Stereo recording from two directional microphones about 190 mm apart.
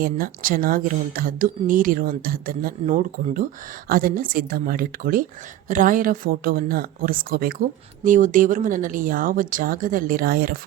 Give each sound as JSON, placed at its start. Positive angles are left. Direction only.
{"t": 0.0, "sound": "speech", "side_deg": -50}